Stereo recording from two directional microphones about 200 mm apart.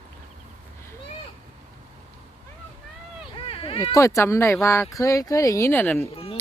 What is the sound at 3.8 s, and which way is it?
Speech, 15° left (ahead or behind).